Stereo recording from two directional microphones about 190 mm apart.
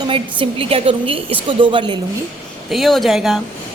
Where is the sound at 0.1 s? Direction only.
30° right (ahead or behind).